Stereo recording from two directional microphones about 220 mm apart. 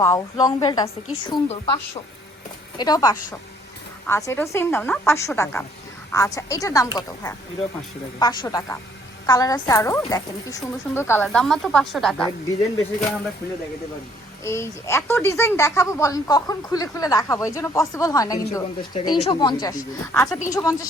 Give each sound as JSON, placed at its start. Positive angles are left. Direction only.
{"t": 0.0, "sound": "a woman's voice", "side_deg": 15}
{"t": 2.7, "sound": "speech", "side_deg": 20}
{"t": 14.4, "sound": "speech", "side_deg": 10}